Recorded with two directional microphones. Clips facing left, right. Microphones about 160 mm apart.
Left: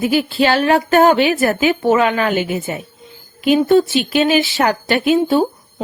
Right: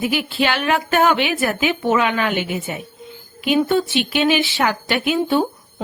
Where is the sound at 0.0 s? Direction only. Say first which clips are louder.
Left 5 dB; 40° left (ahead or behind).